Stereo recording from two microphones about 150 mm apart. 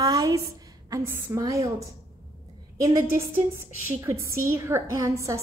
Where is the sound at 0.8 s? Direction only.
20° right (ahead or behind).